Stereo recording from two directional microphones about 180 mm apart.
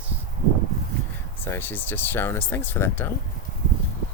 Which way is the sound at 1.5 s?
10° left (ahead or behind).